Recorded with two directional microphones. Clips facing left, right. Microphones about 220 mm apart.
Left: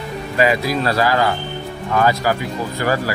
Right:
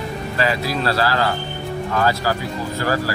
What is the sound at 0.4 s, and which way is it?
Speech, 15° left (ahead or behind).